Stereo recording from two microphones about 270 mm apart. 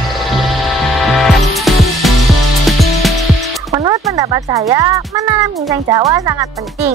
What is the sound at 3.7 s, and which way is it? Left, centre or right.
Music, centre.